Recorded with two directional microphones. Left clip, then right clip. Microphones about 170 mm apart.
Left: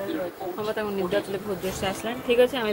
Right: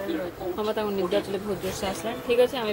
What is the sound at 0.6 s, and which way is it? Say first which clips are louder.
Speech: right 1 dB; 20° right (ahead or behind).